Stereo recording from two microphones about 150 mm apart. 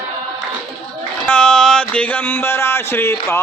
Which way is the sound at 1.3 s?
5° left (ahead or behind).